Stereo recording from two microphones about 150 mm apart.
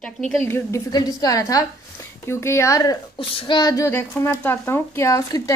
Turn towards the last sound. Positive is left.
turn(degrees=20)  # may be behind; listen again after turning